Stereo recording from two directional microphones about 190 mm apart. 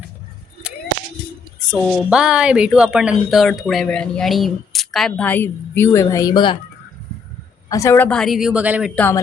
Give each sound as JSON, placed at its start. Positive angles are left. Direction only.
{"t": 1.6, "sound": "a woman's voice", "side_deg": -5}
{"t": 7.7, "sound": "a woman's voice", "side_deg": 15}
{"t": 9.0, "sound": "speech", "side_deg": 10}